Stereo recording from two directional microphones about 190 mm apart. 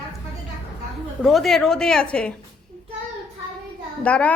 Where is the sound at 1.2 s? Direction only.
Centre (ahead or behind).